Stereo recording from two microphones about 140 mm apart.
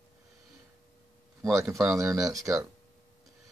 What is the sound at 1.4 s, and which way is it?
Speech, 20° right (ahead or behind).